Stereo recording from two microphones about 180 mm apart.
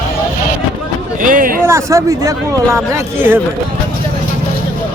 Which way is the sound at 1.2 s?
50° right (ahead or behind).